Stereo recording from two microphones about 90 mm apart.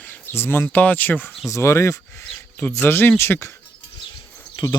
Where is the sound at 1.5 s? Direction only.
30° left (ahead or behind).